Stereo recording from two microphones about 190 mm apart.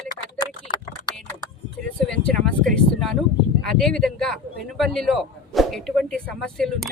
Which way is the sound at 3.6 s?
5° left (ahead or behind).